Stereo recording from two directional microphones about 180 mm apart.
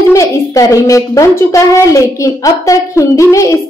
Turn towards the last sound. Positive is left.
turn(degrees=15)  # may be behind; listen again after turning